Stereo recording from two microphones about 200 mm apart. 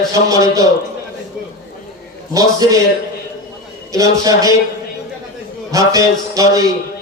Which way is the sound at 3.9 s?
15° right (ahead or behind).